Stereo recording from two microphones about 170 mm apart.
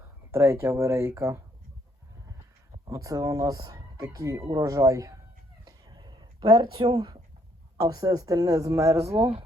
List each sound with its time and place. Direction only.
0.3 s speech: 15° right (ahead or behind)
2.8 s speech: 20° right (ahead or behind)
5.6 s a sound: 25° right (ahead or behind)
7.8 s speech: 20° right (ahead or behind)
9.0 s speech: 35° right (ahead or behind)